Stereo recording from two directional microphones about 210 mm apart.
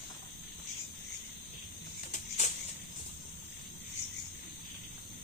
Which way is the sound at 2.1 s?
35° left (ahead or behind).